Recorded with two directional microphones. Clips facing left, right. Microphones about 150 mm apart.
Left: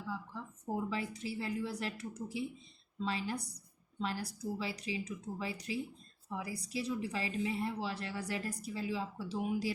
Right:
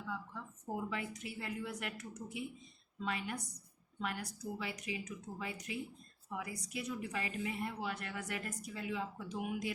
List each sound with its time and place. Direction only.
0.1 s a woman's voice: 30° left (ahead or behind)